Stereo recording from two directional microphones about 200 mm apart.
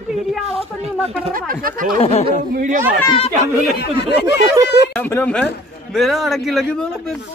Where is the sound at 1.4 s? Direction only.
45° right (ahead or behind).